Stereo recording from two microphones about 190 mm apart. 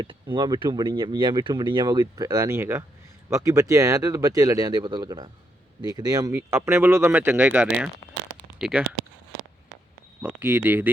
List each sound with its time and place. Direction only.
0.0 s speech: 25° right (ahead or behind); by 8.8 s 5° right (ahead or behind)
10.2 s speech: 10° right (ahead or behind)